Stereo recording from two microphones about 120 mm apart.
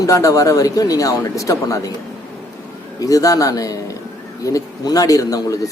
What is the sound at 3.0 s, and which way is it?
Speech, 30° left (ahead or behind).